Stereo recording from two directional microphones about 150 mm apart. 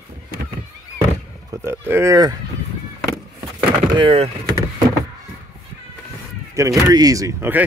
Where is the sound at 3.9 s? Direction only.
40° right (ahead or behind).